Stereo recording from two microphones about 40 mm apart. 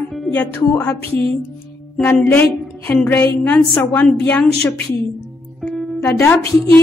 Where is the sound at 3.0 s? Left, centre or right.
Left.